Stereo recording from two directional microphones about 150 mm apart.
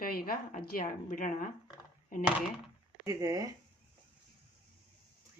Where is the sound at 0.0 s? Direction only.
80° left; by 1.5 s 60° left (ahead or behind).